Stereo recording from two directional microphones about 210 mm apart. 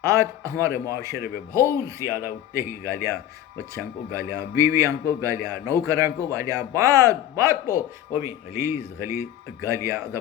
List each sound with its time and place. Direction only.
0.0 s speech: 15° right (ahead or behind)